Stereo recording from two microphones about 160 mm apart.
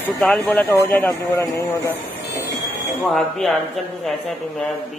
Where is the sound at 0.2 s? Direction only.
5° left (ahead or behind).